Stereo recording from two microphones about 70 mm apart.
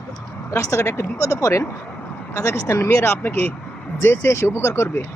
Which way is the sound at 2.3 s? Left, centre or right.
Left.